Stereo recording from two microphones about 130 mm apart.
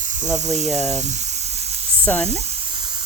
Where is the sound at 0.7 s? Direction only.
Centre (ahead or behind).